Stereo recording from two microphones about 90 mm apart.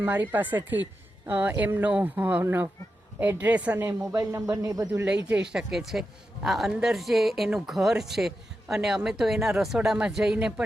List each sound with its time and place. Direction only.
0.0 s speech: 20° right (ahead or behind)
4.1 s speech: 35° right (ahead or behind)
5.0 s speech: 10° right (ahead or behind)